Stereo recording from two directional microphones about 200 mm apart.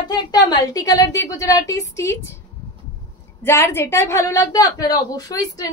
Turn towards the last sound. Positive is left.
turn(degrees=20)  # may be behind; listen again after turning